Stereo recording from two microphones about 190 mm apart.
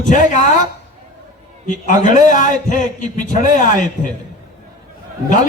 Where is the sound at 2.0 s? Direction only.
45° left (ahead or behind).